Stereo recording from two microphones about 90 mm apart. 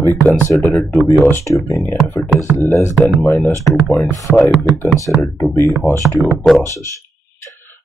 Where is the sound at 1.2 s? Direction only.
30° left (ahead or behind).